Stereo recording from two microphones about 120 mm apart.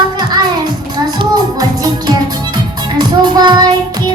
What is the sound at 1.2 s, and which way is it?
Music, 30° right (ahead or behind).